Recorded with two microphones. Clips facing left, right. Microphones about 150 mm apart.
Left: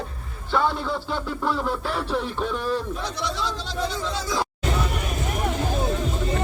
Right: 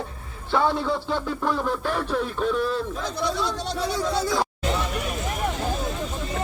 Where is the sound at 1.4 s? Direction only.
5° left (ahead or behind).